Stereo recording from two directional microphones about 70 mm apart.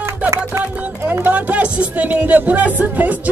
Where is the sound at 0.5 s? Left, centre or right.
Right.